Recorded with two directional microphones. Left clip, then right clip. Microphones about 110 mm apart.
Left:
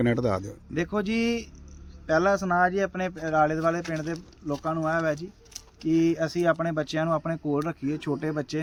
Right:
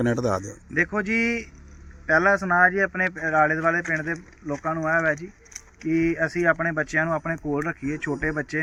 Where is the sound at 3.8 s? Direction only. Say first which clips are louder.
Right 6 dB; 10° left (ahead or behind).